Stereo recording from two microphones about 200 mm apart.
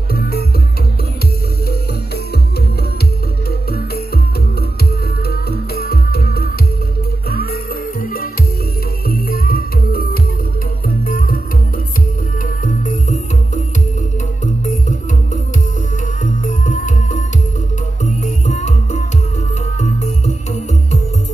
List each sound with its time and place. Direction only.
0.1 s music: 50° left (ahead or behind)
5.3 s music: 50° left (ahead or behind)
8.0 s music: 45° left (ahead or behind)
12.6 s music: 40° left (ahead or behind)
14.4 s music: 35° left (ahead or behind)
16.2 s music: 40° left (ahead or behind)